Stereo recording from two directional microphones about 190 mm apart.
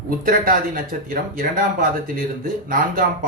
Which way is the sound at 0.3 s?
50° right (ahead or behind).